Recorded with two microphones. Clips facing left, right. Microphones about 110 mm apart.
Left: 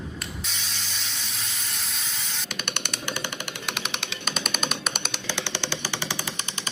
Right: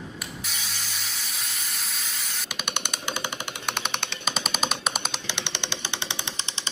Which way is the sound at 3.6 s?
Centre (ahead or behind).